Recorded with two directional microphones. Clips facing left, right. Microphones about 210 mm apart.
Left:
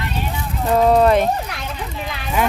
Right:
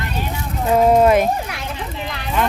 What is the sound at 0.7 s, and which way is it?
Speech, 10° right (ahead or behind).